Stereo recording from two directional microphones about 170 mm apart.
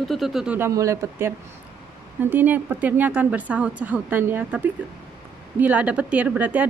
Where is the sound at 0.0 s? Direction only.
Centre (ahead or behind).